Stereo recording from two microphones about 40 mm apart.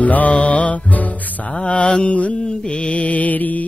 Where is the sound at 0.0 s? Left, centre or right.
Left.